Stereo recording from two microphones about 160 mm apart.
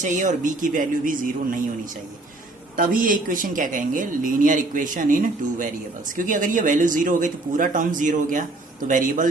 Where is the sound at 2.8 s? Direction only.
60° right (ahead or behind).